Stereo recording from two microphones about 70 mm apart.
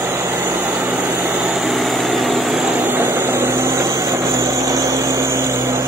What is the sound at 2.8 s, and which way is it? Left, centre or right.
Vehicle, right.